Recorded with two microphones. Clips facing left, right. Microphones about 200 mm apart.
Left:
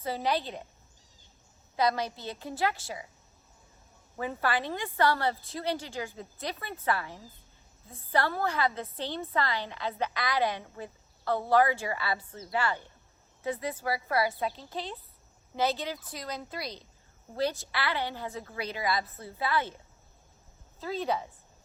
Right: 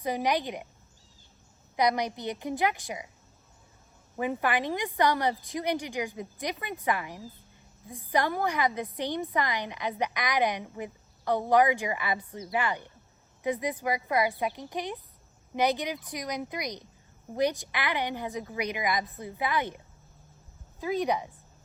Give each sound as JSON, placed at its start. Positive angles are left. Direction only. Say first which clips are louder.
{"t": 0.0, "sound": "a woman's voice", "louder": "right 2 dB", "side_deg": -15}
{"t": 1.7, "sound": "a woman's voice", "louder": "right 2 dB", "side_deg": -15}
{"t": 4.2, "sound": "a woman's voice", "louder": "right 2 dB", "side_deg": -15}
{"t": 20.8, "sound": "a woman's voice", "louder": "right 3 dB", "side_deg": -15}